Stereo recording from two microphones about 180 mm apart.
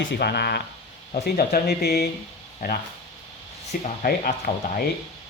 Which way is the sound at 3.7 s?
55° left (ahead or behind).